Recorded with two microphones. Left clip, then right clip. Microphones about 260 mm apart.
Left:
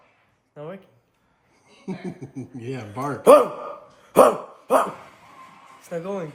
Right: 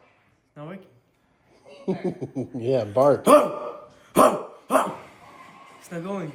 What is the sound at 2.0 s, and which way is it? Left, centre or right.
Speech, centre.